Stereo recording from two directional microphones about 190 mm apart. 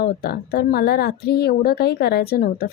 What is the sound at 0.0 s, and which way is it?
Speech, 55° left (ahead or behind).